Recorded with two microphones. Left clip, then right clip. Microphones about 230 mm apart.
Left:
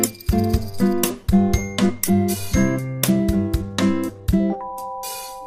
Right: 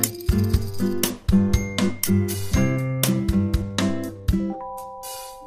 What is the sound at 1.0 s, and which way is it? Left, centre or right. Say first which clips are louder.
Music: left 3 dB; centre.